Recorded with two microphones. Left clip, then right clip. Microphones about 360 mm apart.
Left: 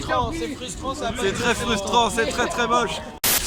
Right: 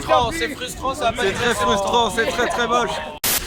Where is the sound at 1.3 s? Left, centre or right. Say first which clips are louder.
Right 1 dB; centre.